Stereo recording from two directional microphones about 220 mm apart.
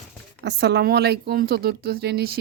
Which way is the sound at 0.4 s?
50° right (ahead or behind).